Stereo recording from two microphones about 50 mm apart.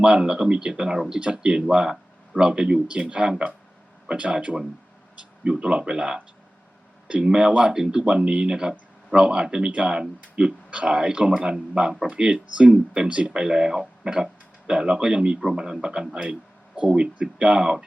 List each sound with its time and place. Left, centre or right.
0.0 s speech: centre